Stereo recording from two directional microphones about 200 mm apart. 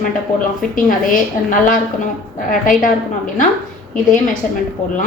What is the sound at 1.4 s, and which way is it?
A woman's voice, 40° left (ahead or behind).